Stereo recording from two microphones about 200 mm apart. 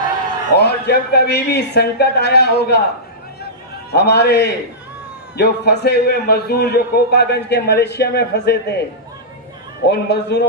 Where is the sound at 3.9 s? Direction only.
55° left (ahead or behind).